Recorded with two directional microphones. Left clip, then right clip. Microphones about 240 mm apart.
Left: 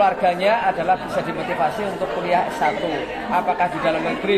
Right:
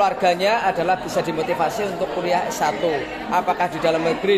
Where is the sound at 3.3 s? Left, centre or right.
Right.